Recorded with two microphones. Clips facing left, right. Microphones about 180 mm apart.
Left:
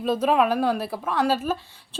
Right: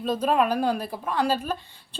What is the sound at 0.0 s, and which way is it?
A woman's voice, 5° left (ahead or behind).